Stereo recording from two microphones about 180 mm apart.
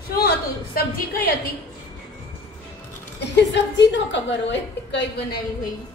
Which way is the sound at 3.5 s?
80° left.